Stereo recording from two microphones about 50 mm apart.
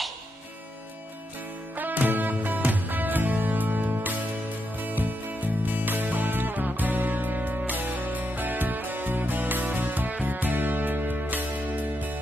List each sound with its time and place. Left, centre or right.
1.8 s music: right